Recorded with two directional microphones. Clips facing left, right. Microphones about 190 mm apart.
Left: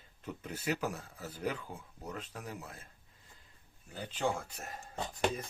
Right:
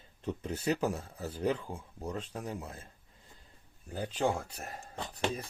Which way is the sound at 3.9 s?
40° right (ahead or behind).